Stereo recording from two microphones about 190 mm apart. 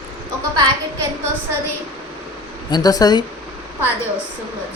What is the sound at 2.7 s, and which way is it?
Speech, 20° left (ahead or behind).